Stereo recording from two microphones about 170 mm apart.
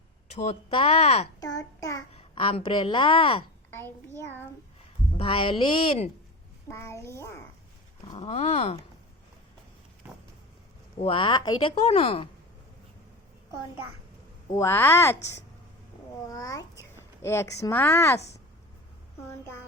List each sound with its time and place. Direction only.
0.3 s speech: 35° left (ahead or behind)
1.4 s a child's voice: 20° left (ahead or behind)
2.1 s speech: 35° left (ahead or behind)
3.7 s a sound: 15° left (ahead or behind)
5.1 s speech: 30° left (ahead or behind)
6.7 s speech: 15° left (ahead or behind)
8.0 s a sound: 25° left (ahead or behind)
8.3 s speech: 40° left (ahead or behind)
11.0 s speech: 30° left (ahead or behind)
14.5 s speech: 15° left (ahead or behind)